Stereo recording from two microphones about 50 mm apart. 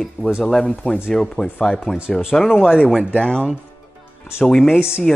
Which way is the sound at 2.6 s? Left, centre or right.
Left.